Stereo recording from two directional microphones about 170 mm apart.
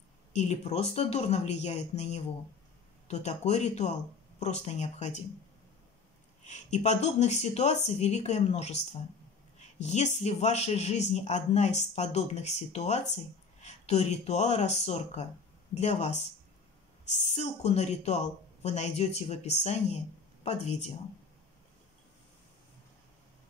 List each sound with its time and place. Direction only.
0.3 s a man's voice: 40° left (ahead or behind)
6.4 s a man's voice: 40° left (ahead or behind)